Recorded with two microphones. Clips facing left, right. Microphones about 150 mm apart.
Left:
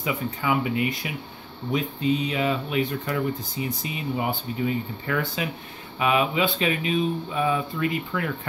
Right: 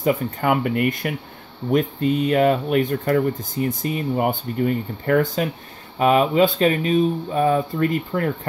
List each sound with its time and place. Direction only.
0.0 s speech: 50° right (ahead or behind)